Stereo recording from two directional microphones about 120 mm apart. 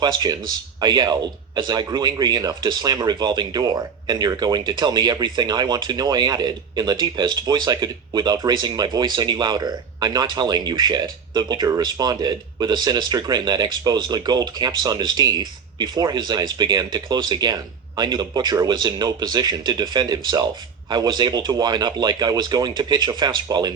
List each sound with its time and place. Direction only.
0.0 s speech: 35° right (ahead or behind)